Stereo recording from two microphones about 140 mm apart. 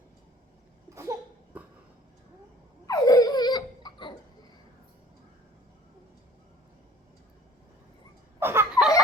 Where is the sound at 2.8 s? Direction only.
25° left (ahead or behind).